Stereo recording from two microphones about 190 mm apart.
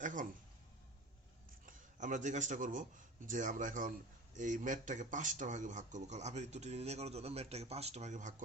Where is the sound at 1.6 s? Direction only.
40° right (ahead or behind).